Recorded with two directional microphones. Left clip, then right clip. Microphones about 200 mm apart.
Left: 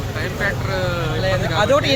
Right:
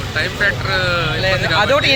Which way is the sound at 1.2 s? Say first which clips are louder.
Right 2 dB; 5° right (ahead or behind).